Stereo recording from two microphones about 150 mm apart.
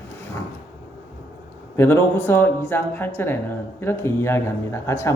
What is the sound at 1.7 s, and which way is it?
A woman's voice, 15° left (ahead or behind).